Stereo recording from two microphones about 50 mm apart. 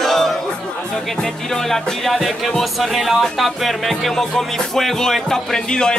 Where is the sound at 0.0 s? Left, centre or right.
Centre.